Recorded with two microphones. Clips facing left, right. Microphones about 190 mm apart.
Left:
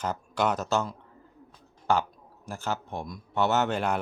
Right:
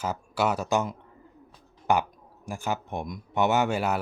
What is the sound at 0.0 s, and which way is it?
Speech, 5° right (ahead or behind).